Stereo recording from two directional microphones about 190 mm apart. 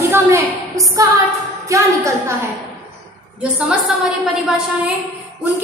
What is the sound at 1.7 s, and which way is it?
Speech, 15° right (ahead or behind).